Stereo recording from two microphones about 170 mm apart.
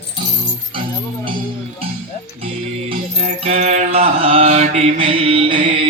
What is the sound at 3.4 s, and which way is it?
Mantra, 40° right (ahead or behind).